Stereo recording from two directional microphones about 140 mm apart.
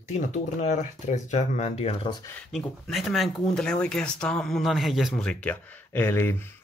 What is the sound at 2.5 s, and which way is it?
Speech, centre (ahead or behind).